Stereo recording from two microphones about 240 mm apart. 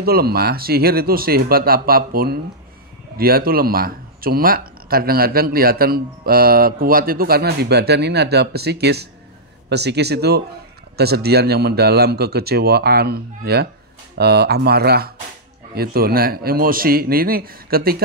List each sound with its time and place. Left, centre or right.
0.0 s speech: right